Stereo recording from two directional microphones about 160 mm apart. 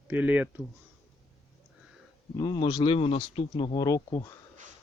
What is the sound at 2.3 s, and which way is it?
Speech, 25° left (ahead or behind).